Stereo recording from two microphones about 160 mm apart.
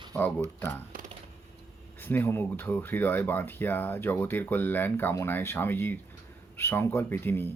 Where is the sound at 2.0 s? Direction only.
15° left (ahead or behind).